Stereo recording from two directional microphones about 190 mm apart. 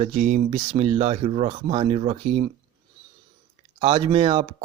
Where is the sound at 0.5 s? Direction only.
30° right (ahead or behind).